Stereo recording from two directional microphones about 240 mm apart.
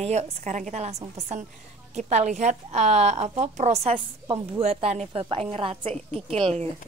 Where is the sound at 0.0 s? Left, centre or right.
Right.